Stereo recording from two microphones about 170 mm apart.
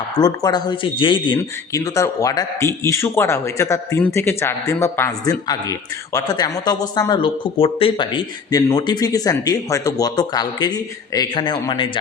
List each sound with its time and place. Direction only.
0.2 s speech: 20° left (ahead or behind)